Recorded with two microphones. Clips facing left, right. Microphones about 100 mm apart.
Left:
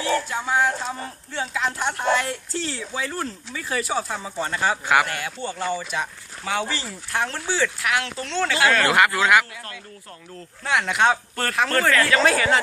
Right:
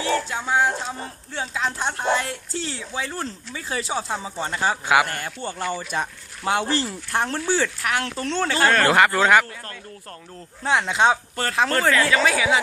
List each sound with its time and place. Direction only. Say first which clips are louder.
0.3 s speech: even; 20° right (ahead or behind)
5.1 s speech: left 1 dB; 45° right (ahead or behind)
7.5 s speech: left 1 dB; 40° right (ahead or behind)
10.6 s speech: right 1 dB; 25° right (ahead or behind)
12.1 s speech: left 1 dB; 5° right (ahead or behind)